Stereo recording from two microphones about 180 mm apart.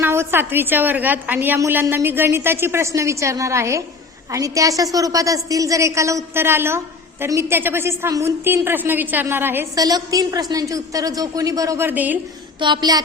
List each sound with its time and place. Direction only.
0.0 s a woman's voice: 15° right (ahead or behind)
12.5 s a woman's voice: 25° right (ahead or behind)